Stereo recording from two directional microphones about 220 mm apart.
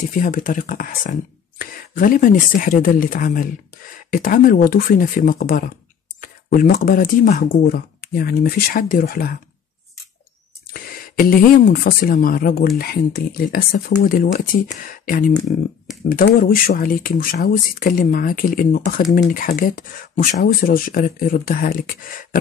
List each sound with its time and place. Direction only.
0.1 s speech: 35° left (ahead or behind)
10.7 s speech: 40° left (ahead or behind)